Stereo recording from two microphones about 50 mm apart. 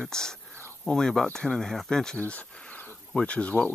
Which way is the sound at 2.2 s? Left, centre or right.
Left.